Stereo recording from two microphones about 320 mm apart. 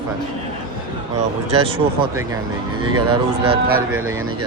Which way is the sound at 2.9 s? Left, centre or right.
Right.